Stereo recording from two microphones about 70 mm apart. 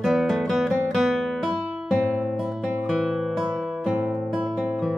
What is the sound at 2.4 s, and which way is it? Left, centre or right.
Music, centre.